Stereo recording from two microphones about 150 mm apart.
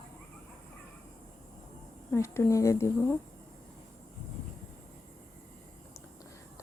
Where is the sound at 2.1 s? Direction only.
15° left (ahead or behind).